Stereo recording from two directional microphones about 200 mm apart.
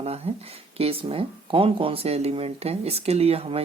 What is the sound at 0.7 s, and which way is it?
Speech, 30° right (ahead or behind).